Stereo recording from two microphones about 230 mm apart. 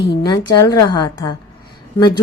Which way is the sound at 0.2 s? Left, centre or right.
Centre.